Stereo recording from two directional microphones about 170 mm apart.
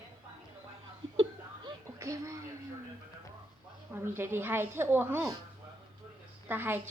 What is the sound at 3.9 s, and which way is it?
A woman's voice, 15° right (ahead or behind).